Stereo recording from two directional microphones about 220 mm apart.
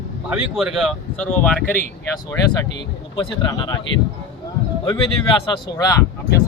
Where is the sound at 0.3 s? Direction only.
Centre (ahead or behind).